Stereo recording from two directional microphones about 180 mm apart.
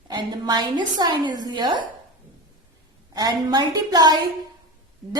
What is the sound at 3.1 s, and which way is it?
A woman's voice, 20° right (ahead or behind).